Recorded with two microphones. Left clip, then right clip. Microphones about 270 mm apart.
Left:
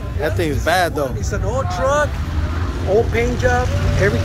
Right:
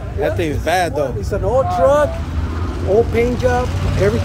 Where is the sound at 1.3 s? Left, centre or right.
Right.